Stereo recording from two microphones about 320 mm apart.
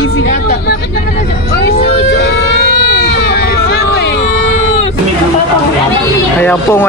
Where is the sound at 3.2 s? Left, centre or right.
Left.